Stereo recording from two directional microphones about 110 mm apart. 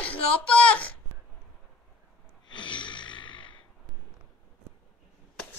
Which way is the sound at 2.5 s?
50° left (ahead or behind).